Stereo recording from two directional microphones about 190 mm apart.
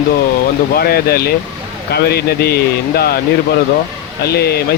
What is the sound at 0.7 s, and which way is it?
Speech, 55° left (ahead or behind).